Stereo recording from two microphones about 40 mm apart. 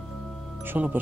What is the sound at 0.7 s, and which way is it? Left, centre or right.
Speech, right.